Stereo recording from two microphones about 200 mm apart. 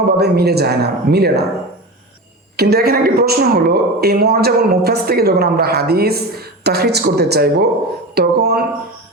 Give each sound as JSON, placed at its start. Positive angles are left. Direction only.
{"t": 0.2, "sound": "a woman's voice", "side_deg": -55}
{"t": 2.6, "sound": "a woman's voice", "side_deg": -50}